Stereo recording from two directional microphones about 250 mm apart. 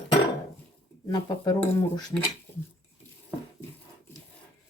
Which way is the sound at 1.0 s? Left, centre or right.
Centre.